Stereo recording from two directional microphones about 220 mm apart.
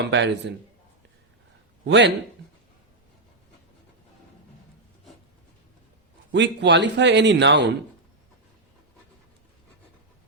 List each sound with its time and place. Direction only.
0.0 s a man's voice: 55° right (ahead or behind)
1.9 s a man's voice: 55° right (ahead or behind)
6.3 s a man's voice: 55° right (ahead or behind)